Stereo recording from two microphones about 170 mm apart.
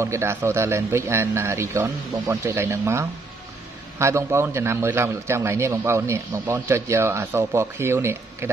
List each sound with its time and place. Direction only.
0.0 s a man's voice: 15° right (ahead or behind)